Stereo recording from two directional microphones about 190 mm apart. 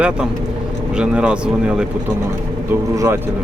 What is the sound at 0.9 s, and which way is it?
Speech, 5° right (ahead or behind).